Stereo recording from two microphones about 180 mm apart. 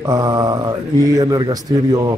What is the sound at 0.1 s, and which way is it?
Speech, 20° right (ahead or behind).